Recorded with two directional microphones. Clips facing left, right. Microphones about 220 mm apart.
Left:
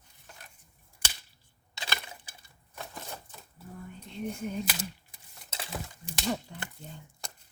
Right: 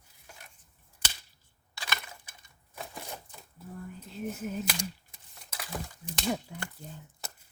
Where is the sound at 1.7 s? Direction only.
25° left (ahead or behind).